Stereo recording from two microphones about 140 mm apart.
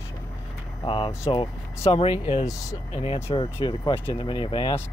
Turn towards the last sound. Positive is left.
turn(degrees=35)  # may be behind; listen again after turning